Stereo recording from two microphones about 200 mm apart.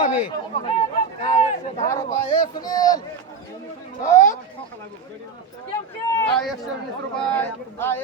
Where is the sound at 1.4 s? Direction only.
35° left (ahead or behind); by 3.0 s 20° left (ahead or behind).